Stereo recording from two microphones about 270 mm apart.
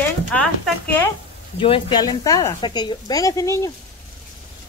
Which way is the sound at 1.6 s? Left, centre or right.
Centre.